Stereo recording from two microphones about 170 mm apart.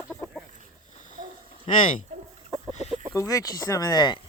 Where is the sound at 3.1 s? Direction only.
20° left (ahead or behind).